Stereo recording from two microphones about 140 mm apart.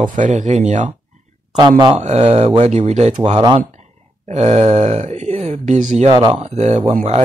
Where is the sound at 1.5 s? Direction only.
30° right (ahead or behind).